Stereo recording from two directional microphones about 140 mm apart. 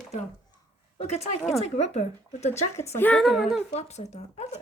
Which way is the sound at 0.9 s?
50° left (ahead or behind).